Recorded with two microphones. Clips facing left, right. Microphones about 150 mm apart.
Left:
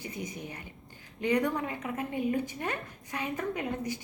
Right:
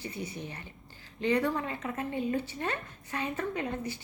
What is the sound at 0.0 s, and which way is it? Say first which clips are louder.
A woman's voice: even; 15° left (ahead or behind).